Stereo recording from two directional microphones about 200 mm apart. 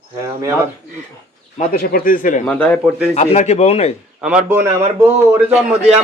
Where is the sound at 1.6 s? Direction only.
45° left (ahead or behind).